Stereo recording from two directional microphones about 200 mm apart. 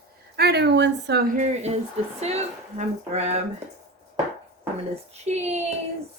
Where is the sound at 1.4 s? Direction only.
35° right (ahead or behind).